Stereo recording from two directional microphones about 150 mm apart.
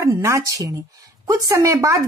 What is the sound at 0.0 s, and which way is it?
Speech, 20° right (ahead or behind).